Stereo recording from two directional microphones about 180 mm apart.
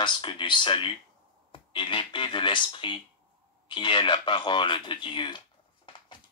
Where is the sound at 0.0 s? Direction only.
25° left (ahead or behind).